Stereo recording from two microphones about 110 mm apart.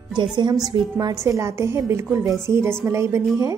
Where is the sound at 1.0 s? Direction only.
25° right (ahead or behind).